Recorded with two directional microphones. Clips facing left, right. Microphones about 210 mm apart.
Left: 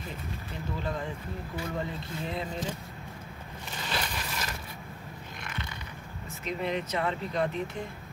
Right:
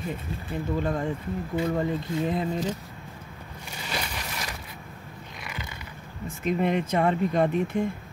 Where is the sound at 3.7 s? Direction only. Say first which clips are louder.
Right 1 dB; 15° right (ahead or behind).